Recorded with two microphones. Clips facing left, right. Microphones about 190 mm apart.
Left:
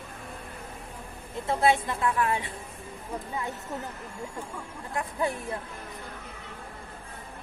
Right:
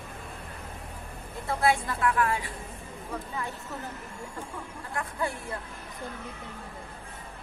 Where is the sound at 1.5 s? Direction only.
20° left (ahead or behind).